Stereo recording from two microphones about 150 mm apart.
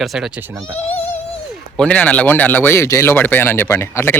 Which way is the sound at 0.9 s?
15° left (ahead or behind).